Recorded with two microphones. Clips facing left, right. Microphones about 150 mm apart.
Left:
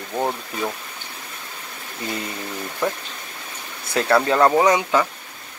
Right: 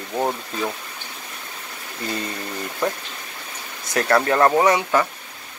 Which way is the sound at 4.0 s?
20° left (ahead or behind).